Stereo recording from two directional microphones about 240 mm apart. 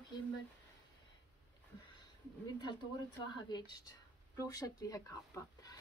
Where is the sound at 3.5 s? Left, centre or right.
Centre.